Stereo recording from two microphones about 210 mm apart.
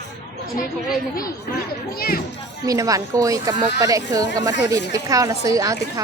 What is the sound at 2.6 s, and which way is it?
Speech, 15° right (ahead or behind).